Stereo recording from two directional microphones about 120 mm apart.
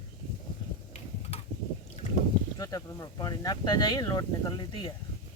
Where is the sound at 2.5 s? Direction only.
30° left (ahead or behind); by 4.9 s 45° left (ahead or behind).